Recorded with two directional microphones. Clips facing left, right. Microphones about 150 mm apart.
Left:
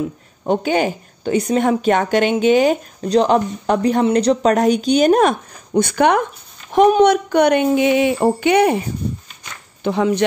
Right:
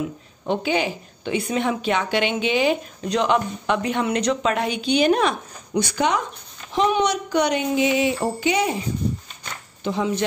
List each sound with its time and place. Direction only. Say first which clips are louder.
0.5 s a woman's voice: left 5 dB; 45° left (ahead or behind)
5.8 s speech: left 7 dB; 55° left (ahead or behind)
9.8 s speech: left 6 dB; 65° left (ahead or behind)